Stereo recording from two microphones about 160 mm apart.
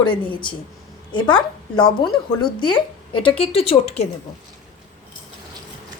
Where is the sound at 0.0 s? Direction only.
30° left (ahead or behind).